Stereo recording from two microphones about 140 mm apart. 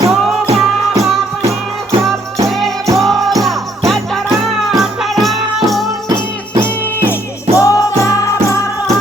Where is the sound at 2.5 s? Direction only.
Centre (ahead or behind).